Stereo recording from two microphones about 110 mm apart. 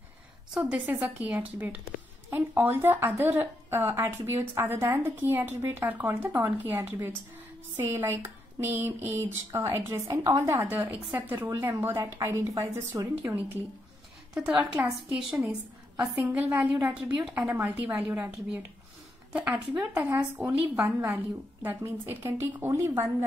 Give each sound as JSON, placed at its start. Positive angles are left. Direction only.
{"t": 0.6, "sound": "a woman's voice", "side_deg": -10}
{"t": 13.2, "sound": "a woman's voice", "side_deg": -20}
{"t": 20.8, "sound": "speech", "side_deg": -30}